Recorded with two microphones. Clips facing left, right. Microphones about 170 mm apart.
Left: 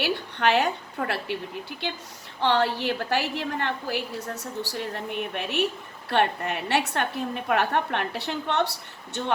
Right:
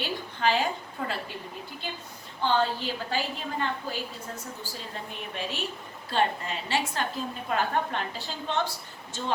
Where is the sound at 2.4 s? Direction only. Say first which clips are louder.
Left 3 dB; 70° left (ahead or behind).